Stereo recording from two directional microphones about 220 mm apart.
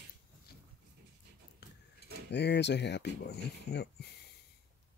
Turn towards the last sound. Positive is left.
turn(degrees=50)  # may be behind; listen again after turning